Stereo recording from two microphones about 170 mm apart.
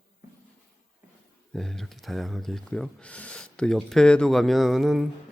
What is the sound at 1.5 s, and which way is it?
Speech, 5° left (ahead or behind).